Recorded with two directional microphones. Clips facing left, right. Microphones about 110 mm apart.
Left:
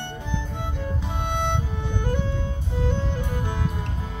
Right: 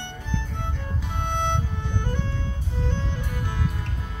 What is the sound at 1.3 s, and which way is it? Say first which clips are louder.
Music: even; 10° left (ahead or behind).